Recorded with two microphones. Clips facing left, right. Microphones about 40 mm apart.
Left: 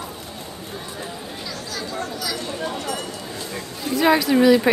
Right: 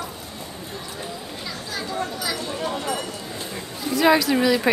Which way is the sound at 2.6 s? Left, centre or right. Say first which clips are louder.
Right 2 dB; centre.